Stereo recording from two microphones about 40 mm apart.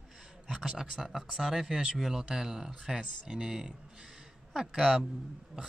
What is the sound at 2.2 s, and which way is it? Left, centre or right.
Speech, centre.